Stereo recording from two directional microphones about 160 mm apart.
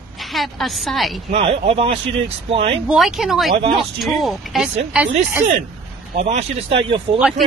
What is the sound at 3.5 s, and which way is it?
Speech, 35° right (ahead or behind).